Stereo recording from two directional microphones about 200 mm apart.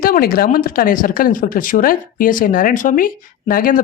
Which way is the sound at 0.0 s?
45° left (ahead or behind).